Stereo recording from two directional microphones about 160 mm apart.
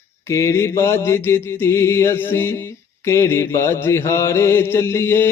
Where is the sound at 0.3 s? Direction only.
20° left (ahead or behind).